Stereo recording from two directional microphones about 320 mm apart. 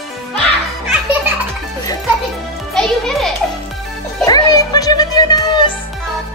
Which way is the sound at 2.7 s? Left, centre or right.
Centre.